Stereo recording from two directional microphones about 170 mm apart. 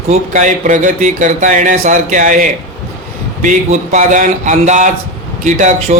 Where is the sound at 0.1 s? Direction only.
45° right (ahead or behind).